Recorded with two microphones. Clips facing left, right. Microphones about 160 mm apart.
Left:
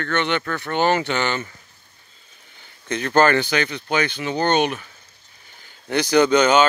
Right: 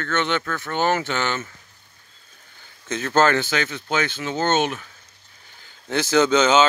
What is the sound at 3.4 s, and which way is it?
Speech, 15° left (ahead or behind).